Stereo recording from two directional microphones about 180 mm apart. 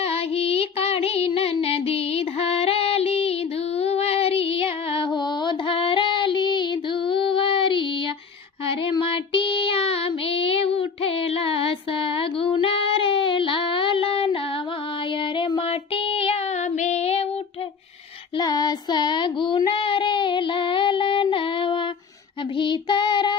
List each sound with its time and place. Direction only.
0.0 s music: 35° left (ahead or behind)
8.6 s child singing: 30° left (ahead or behind)
18.4 s child singing: 20° left (ahead or behind)